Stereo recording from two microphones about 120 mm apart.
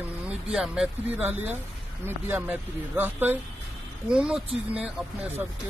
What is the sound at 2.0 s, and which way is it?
Speech, 15° right (ahead or behind).